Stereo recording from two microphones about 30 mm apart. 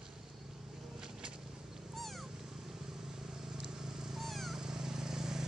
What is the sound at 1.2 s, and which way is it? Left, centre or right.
Vehicle, right.